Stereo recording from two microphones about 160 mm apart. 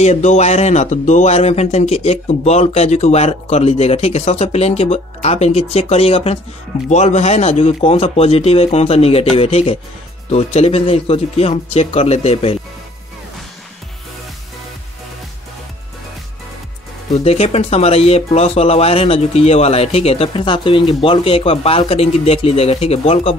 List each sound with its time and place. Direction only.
0.0 s speech: 45° left (ahead or behind)
17.1 s speech: 40° left (ahead or behind)